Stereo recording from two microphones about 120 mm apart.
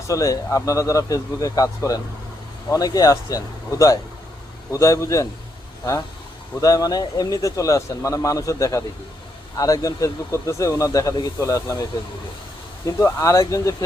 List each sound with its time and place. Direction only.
0.1 s speech: 30° left (ahead or behind)
6.6 s speech: 30° left (ahead or behind)